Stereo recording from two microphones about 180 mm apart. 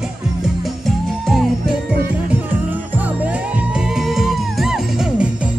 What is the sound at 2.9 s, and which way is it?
Music, 10° right (ahead or behind).